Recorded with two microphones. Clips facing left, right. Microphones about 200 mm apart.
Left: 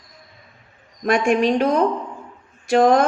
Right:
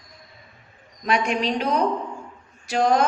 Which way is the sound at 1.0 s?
50° left (ahead or behind).